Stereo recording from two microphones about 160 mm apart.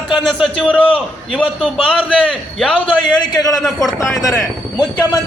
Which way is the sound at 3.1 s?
25° left (ahead or behind).